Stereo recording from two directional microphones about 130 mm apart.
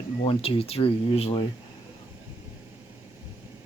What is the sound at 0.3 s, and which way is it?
Speech, 45° left (ahead or behind).